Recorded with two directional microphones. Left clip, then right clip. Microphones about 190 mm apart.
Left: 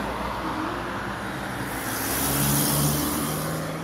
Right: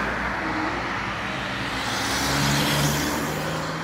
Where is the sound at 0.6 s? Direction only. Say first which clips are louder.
Right 3 dB; 70° left (ahead or behind).